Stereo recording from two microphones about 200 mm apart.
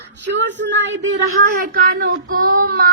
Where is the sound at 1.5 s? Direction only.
45° right (ahead or behind).